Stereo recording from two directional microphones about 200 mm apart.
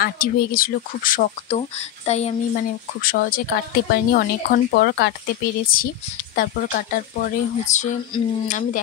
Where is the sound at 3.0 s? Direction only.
45° left (ahead or behind).